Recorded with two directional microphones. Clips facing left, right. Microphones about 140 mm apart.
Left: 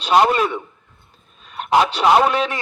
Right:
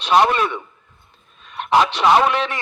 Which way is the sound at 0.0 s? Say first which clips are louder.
Left 1 dB; 35° left (ahead or behind).